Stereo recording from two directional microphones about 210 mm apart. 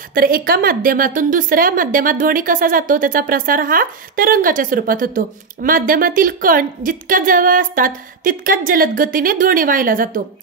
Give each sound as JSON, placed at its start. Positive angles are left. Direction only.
{"t": 0.1, "sound": "a woman's voice", "side_deg": -45}